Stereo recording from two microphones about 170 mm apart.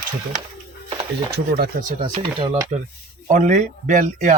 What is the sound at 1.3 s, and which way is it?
Speech, 65° right (ahead or behind).